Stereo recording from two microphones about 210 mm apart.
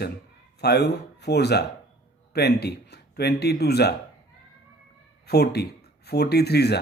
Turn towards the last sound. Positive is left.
turn(degrees=50)  # may be behind; listen again after turning